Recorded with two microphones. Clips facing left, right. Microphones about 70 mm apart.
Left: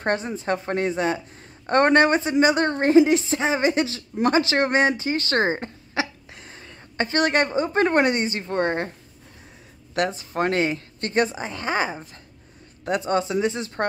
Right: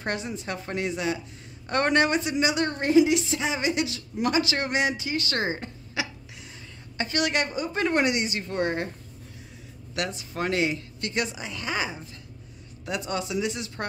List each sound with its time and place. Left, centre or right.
0.0 s a woman's voice: left
9.9 s a woman's voice: left